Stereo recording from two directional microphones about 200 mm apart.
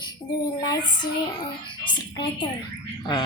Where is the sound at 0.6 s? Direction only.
20° left (ahead or behind).